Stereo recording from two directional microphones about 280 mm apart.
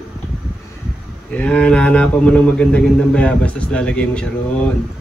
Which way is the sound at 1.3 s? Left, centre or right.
Centre.